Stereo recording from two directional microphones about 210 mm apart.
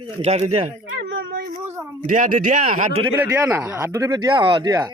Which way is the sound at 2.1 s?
40° right (ahead or behind).